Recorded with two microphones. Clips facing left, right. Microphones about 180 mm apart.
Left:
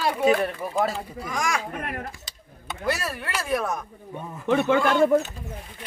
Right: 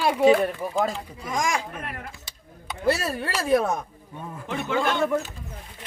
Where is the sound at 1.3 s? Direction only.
20° right (ahead or behind).